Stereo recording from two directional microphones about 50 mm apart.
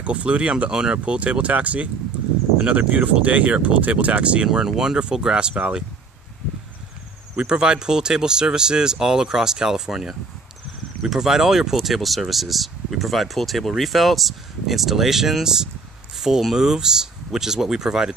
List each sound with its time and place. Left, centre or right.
0.0 s speech: right
4.5 s speech: centre
7.3 s speech: centre